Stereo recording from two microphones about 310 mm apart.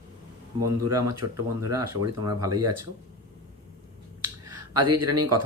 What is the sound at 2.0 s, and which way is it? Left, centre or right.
Speech, centre.